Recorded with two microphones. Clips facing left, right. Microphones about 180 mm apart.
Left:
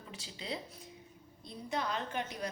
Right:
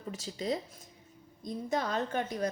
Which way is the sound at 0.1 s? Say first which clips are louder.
Right 8 dB; 45° right (ahead or behind).